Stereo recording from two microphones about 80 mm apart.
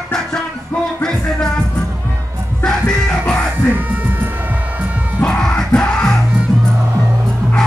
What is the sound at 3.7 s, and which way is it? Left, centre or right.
Music, right.